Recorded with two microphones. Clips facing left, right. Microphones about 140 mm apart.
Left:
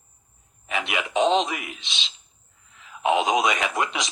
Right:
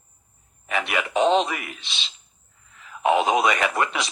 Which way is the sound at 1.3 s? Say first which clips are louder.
Right 3 dB; 10° right (ahead or behind).